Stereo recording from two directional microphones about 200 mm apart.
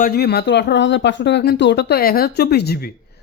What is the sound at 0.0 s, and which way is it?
Speech, 50° left (ahead or behind).